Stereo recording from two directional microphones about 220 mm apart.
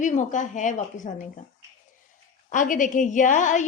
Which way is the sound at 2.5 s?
35° left (ahead or behind).